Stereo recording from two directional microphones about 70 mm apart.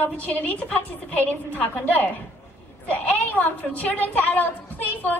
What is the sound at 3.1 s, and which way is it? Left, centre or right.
A woman's voice, left.